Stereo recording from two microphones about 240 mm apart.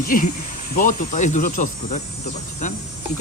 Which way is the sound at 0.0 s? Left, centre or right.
Left.